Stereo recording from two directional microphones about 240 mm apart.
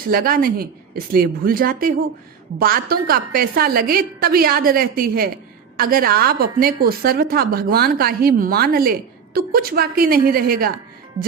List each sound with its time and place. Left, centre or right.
0.1 s a woman's voice: right